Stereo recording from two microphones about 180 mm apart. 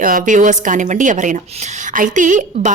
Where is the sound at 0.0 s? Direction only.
50° right (ahead or behind).